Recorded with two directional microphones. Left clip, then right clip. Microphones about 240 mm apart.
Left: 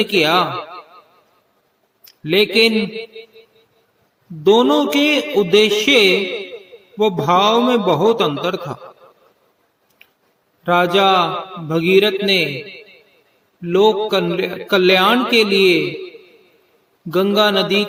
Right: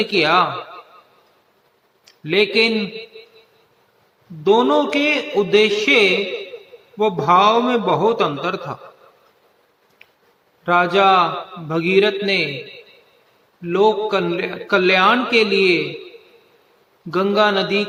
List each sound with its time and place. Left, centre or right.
0.0 s a man's voice: left
2.0 s a man's voice: left
4.4 s a man's voice: left
10.6 s a man's voice: left
17.1 s a man's voice: left